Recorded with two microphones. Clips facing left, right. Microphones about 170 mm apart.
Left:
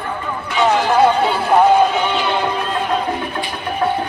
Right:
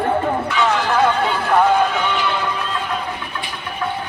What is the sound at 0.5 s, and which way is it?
Run, 25° left (ahead or behind).